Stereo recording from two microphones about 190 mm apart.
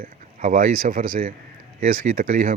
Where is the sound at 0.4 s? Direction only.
45° right (ahead or behind).